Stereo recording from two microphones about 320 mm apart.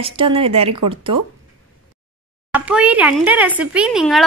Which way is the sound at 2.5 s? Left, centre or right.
Centre.